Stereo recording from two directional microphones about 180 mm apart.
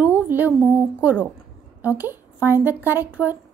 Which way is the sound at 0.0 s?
10° right (ahead or behind).